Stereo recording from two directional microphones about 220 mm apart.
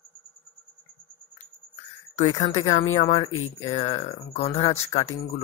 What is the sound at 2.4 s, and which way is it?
Speech, 20° left (ahead or behind).